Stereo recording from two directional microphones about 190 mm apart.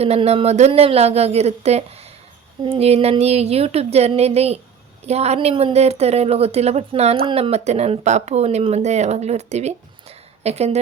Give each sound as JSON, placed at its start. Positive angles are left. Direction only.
{"t": 0.0, "sound": "speech", "side_deg": -35}